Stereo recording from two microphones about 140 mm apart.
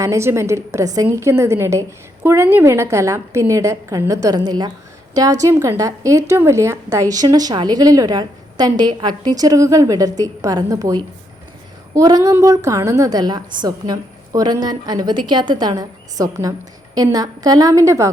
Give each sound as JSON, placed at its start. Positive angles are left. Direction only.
{"t": 0.0, "sound": "a woman's voice", "side_deg": -20}